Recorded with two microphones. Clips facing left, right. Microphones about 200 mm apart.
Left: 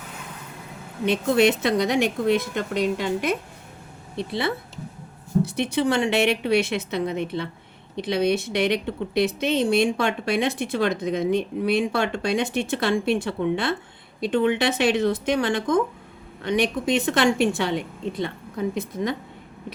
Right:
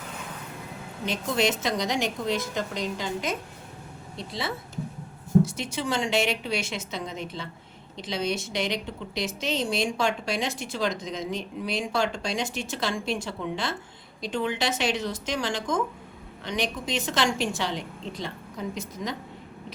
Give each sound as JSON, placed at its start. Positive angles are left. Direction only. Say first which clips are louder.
{"t": 1.0, "sound": "speech", "louder": "left 7 dB", "side_deg": 60}